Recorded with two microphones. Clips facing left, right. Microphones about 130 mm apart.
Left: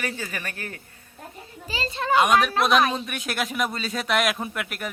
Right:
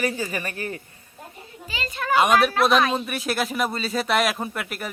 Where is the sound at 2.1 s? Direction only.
Centre (ahead or behind).